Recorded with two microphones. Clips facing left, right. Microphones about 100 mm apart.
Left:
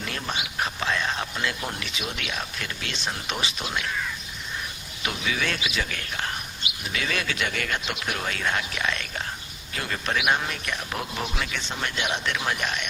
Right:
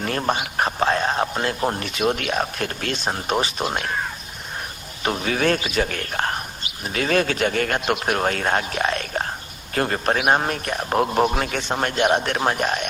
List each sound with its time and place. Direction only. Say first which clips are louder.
0.0 s speech: right 9 dB; 45° right (ahead or behind)